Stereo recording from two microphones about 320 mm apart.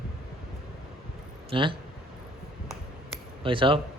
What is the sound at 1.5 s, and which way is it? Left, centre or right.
Speech, centre.